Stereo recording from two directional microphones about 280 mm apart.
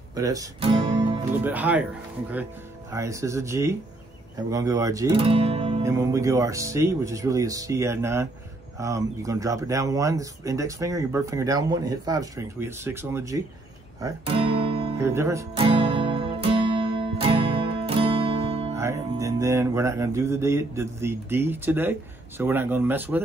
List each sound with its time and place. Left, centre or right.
0.1 s guitar: centre
1.4 s speech: centre
2.9 s speech: centre
5.9 s speech: centre
14.0 s guitar: centre
18.8 s music: centre
22.4 s speech: centre